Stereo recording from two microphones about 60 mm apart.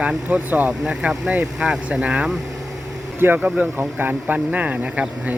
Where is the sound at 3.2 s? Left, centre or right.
Right.